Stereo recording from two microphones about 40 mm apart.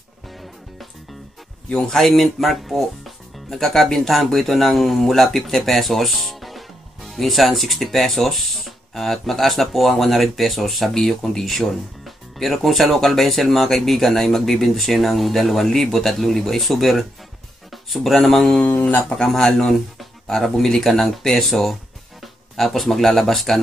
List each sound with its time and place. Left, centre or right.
1.7 s speech: centre
18.6 s speech: left
19.1 s speech: centre